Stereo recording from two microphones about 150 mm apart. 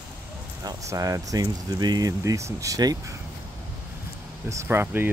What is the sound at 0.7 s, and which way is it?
Speech, 20° right (ahead or behind).